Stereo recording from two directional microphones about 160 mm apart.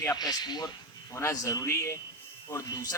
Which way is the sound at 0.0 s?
20° left (ahead or behind).